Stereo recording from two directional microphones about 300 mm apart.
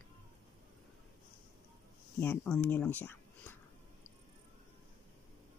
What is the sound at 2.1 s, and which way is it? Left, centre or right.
Speech, centre.